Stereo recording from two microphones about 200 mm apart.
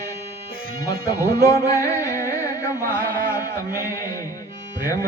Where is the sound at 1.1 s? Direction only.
50° right (ahead or behind).